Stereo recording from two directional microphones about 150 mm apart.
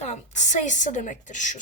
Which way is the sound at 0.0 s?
50° left (ahead or behind).